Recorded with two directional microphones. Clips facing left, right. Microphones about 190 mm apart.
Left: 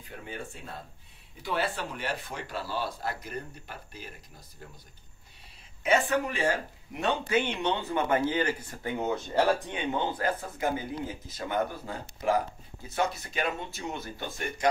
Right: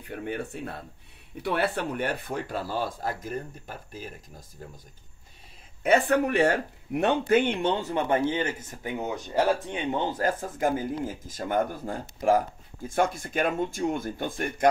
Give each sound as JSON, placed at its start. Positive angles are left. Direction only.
{"t": 0.1, "sound": "speech", "side_deg": -60}
{"t": 5.9, "sound": "speech", "side_deg": -60}
{"t": 9.9, "sound": "speech", "side_deg": -40}